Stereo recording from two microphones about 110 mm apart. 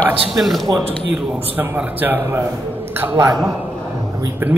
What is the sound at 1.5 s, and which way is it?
Speech, 15° right (ahead or behind).